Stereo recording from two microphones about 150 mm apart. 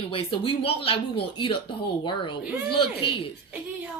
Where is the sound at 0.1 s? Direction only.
35° left (ahead or behind).